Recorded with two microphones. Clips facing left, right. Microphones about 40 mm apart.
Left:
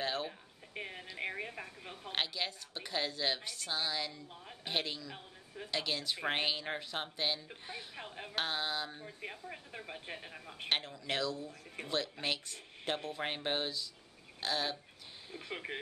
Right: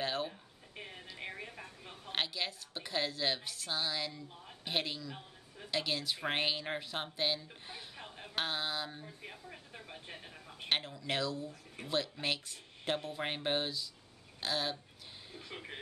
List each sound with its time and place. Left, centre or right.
0.0 s a sound: centre
0.7 s a sound: left
2.1 s a woman's voice: centre
7.9 s a woman's voice: centre
8.4 s a woman's voice: centre
9.0 s speech: centre
10.7 s a woman's voice: centre
15.5 s speech: left